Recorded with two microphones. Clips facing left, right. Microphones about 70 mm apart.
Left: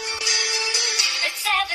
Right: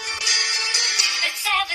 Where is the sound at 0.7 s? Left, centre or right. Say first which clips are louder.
Right 1 dB; right.